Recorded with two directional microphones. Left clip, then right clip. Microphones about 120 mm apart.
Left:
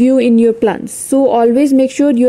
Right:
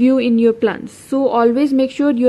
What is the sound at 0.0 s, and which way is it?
A woman's voice, 35° left (ahead or behind).